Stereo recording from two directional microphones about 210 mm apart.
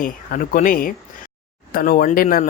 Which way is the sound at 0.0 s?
40° left (ahead or behind).